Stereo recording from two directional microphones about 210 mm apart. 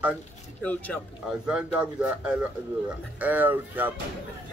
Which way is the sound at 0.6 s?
5° left (ahead or behind).